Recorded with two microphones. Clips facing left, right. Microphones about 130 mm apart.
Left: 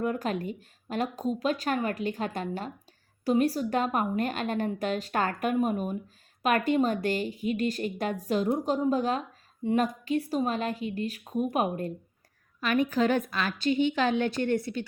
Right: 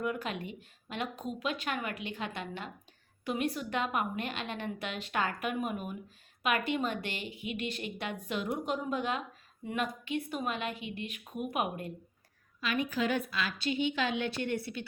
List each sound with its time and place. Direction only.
0.0 s a woman's voice: 40° left (ahead or behind)
12.5 s a woman's voice: 50° left (ahead or behind)